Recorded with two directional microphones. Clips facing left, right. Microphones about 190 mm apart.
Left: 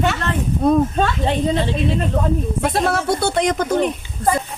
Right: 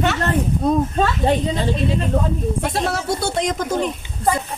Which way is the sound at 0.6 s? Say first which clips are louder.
Left 4 dB; 60° left (ahead or behind).